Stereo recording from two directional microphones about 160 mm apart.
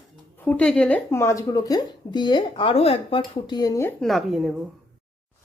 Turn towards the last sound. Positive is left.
turn(degrees=0)  # may be behind; listen again after turning